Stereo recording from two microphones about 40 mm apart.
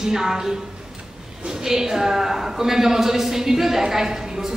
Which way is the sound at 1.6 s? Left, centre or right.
Centre.